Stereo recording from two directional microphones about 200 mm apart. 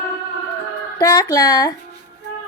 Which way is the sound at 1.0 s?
20° left (ahead or behind).